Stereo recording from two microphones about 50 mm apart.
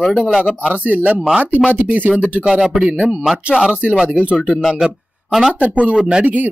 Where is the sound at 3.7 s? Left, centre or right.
Right.